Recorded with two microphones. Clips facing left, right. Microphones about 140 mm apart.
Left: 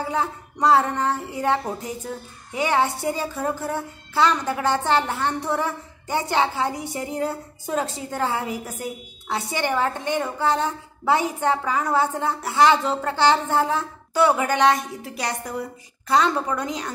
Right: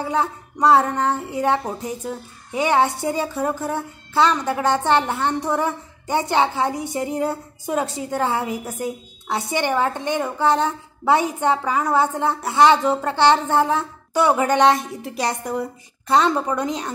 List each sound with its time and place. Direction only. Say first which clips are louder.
0.1 s a woman's voice: right 3 dB; 20° right (ahead or behind)